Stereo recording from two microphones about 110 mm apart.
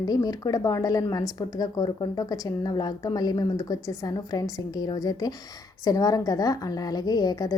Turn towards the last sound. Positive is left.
turn(degrees=35)  # may be behind; listen again after turning